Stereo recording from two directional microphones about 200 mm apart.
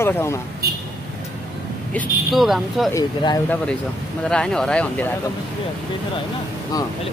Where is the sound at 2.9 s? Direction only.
20° left (ahead or behind).